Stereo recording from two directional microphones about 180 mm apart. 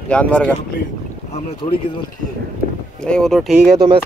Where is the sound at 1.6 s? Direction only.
35° left (ahead or behind).